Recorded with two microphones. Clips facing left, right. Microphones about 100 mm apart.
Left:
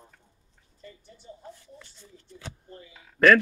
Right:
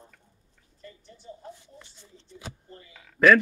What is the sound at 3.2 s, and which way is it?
Speech, centre (ahead or behind).